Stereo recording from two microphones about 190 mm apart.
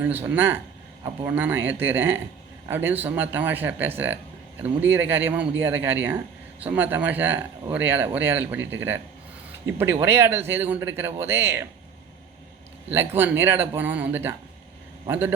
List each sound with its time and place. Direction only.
0.3 s a man's voice: 10° right (ahead or behind)
12.9 s a man's voice: 10° right (ahead or behind)